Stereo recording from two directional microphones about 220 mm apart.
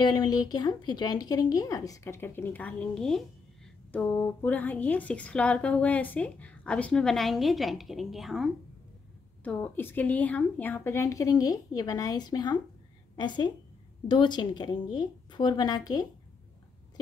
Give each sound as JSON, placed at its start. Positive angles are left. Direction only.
{"t": 0.0, "sound": "a woman's voice", "side_deg": 20}